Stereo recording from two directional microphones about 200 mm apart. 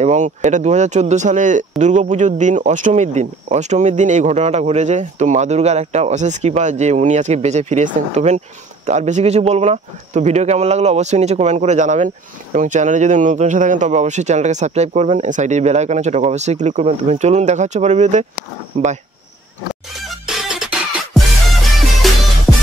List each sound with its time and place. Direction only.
0.0 s speech: 35° right (ahead or behind)
20.2 s music: centre (ahead or behind)